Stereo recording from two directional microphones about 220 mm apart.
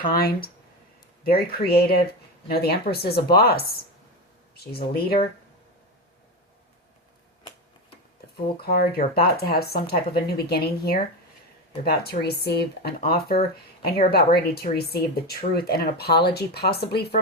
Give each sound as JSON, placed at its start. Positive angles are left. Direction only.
{"t": 0.1, "sound": "speech", "side_deg": 45}
{"t": 8.6, "sound": "speech", "side_deg": 45}